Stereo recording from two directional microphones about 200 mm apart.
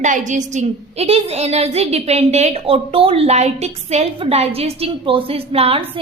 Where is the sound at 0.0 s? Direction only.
40° right (ahead or behind).